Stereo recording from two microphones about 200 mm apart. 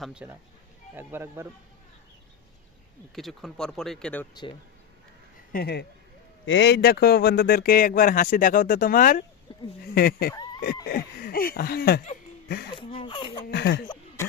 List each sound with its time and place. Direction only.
0.0 s speech: 5° right (ahead or behind)
3.2 s speech: centre (ahead or behind)
5.5 s speech: 50° left (ahead or behind)
6.4 s a man's voice: 70° left (ahead or behind); by 9.2 s 45° left (ahead or behind)
9.5 s a sound: 25° left (ahead or behind)
9.9 s a man's voice: 50° left (ahead or behind)
12.7 s speech: 25° left (ahead or behind)
13.4 s a sound: 55° left (ahead or behind)
13.8 s a sound: 20° left (ahead or behind)